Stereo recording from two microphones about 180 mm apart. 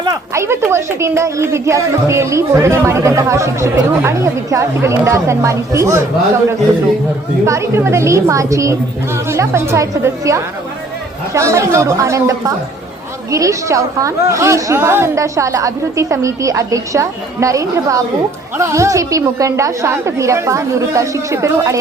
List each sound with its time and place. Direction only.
0.0 s speech: 15° right (ahead or behind)
7.4 s speech: 15° right (ahead or behind)